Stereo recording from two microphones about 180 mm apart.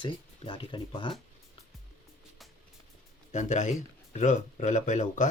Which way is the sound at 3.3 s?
40° left (ahead or behind).